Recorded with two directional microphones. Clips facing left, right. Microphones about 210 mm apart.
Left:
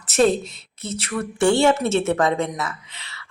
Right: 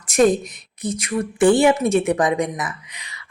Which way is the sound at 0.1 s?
15° right (ahead or behind).